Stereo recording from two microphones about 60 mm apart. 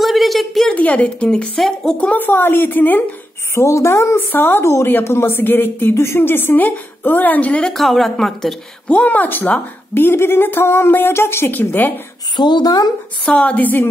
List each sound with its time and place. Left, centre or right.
0.0 s a sound: centre
0.7 s a woman's voice: left
1.6 s speech: centre
2.0 s a woman's voice: left
3.5 s a woman's voice: left
4.3 s a woman's voice: left
7.6 s a woman's voice: centre
8.8 s a woman's voice: left
13.2 s a woman's voice: left